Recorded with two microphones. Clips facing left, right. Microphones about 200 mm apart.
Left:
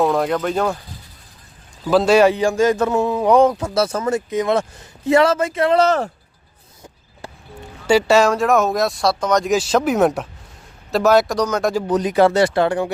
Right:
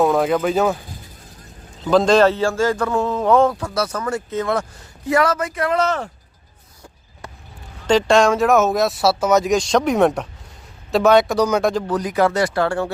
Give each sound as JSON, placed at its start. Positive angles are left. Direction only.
{"t": 0.0, "sound": "speech", "side_deg": 0}
{"t": 1.8, "sound": "a man's voice", "side_deg": 5}
{"t": 7.9, "sound": "speech", "side_deg": 10}
{"t": 11.7, "sound": "a man's voice", "side_deg": 10}
{"t": 11.9, "sound": "speech", "side_deg": 25}